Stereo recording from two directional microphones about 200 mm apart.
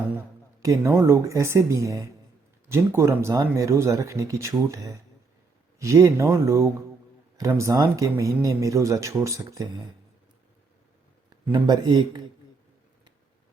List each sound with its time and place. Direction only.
0.6 s speech: 15° right (ahead or behind)
11.5 s speech: 20° right (ahead or behind)